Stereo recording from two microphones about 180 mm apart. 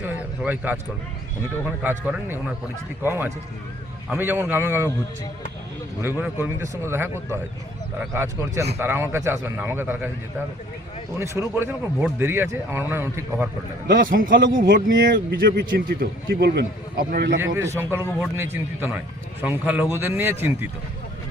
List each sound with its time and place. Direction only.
0.0 s a man's voice: 10° right (ahead or behind)
1.8 s speech: 10° right (ahead or behind)
6.0 s speech: 10° right (ahead or behind)
11.2 s speech: 15° right (ahead or behind)
13.8 s a man's voice: 50° right (ahead or behind)
17.4 s speech: 15° right (ahead or behind)